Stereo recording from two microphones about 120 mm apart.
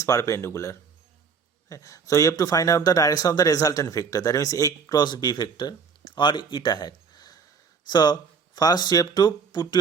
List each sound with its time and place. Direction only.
0.0 s speech: 25° left (ahead or behind)